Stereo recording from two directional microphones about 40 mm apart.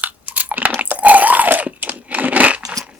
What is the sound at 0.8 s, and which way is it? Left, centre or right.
Crunch, right.